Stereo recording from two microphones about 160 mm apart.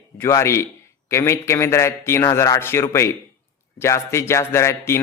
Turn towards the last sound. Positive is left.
turn(degrees=15)  # may be behind; listen again after turning